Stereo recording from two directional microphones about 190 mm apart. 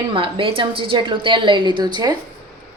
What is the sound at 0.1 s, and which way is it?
Speech, 25° right (ahead or behind).